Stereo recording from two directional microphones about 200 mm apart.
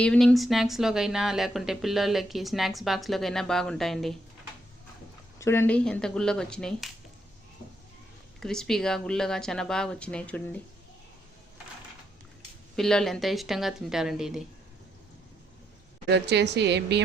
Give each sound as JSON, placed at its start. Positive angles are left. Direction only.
{"t": 0.0, "sound": "speech", "side_deg": 5}
{"t": 5.4, "sound": "speech", "side_deg": 10}
{"t": 8.4, "sound": "speech", "side_deg": 0}
{"t": 12.7, "sound": "speech", "side_deg": 0}
{"t": 16.0, "sound": "speech", "side_deg": -60}